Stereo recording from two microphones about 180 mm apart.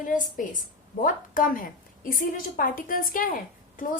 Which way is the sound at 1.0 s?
50° left (ahead or behind).